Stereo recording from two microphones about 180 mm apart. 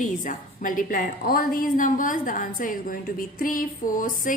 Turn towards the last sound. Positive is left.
turn(degrees=50)  # may be behind; listen again after turning